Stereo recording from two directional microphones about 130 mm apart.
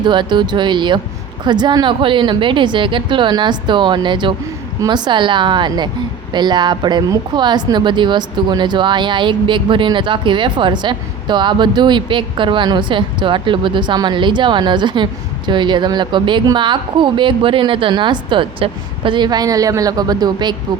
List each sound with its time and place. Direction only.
0.0 s a woman's voice: 35° right (ahead or behind)